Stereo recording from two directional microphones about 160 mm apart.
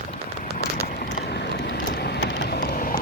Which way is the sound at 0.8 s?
65° left (ahead or behind).